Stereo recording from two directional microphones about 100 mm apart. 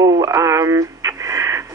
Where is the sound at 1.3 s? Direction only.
30° right (ahead or behind).